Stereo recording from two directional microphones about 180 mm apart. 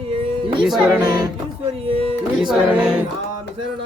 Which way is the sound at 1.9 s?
35° right (ahead or behind).